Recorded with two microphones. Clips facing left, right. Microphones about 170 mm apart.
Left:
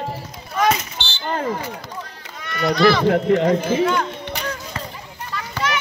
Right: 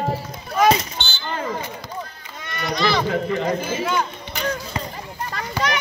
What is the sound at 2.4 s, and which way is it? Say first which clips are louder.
Run: left 5 dB; 20° right (ahead or behind).